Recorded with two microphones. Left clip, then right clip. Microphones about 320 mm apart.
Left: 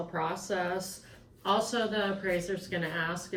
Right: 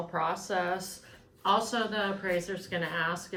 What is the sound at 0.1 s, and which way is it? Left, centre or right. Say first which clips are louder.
A woman's voice: right 3 dB; centre.